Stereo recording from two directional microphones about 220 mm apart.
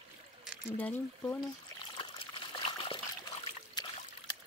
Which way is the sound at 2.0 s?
25° left (ahead or behind).